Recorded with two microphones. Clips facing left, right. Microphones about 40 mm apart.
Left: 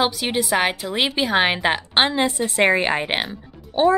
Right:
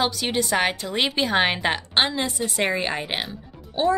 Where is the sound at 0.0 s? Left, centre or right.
Centre.